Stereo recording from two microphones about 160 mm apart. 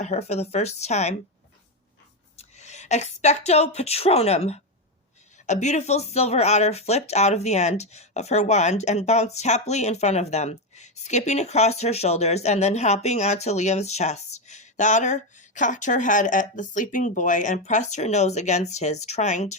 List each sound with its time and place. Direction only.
0.0 s speech: 40° left (ahead or behind)
2.3 s speech: 45° left (ahead or behind)